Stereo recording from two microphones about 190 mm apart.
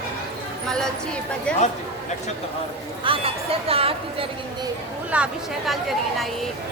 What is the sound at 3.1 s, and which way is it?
Speech, 30° right (ahead or behind).